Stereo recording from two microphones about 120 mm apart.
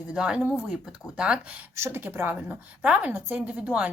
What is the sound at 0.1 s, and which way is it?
A woman's voice, 5° right (ahead or behind).